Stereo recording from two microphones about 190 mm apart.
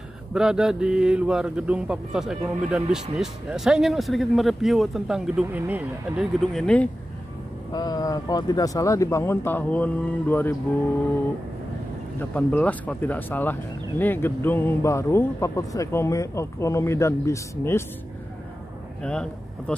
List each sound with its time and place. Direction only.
0.3 s speech: 5° right (ahead or behind)
7.7 s speech: 20° left (ahead or behind)
12.2 s speech: 5° left (ahead or behind)
19.0 s speech: 5° left (ahead or behind)